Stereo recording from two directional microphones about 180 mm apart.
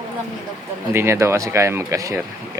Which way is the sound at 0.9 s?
15° right (ahead or behind).